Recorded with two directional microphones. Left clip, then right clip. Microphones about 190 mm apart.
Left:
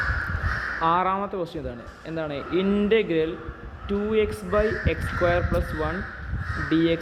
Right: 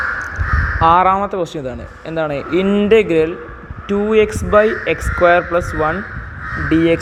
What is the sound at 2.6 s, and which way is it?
Speech, 25° right (ahead or behind).